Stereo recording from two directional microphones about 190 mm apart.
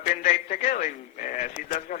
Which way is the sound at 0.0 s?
45° left (ahead or behind).